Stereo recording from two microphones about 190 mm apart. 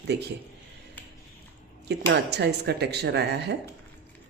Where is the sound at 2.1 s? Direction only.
60° right (ahead or behind).